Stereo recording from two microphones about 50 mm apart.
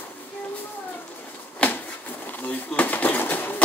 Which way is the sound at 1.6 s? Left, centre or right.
Left.